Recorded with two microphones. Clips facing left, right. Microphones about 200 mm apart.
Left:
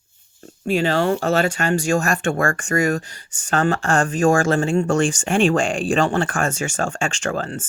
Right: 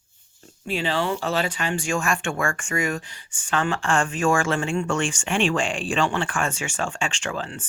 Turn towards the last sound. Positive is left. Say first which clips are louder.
# left 6 dB
turn(degrees=45)  # may be behind; listen again after turning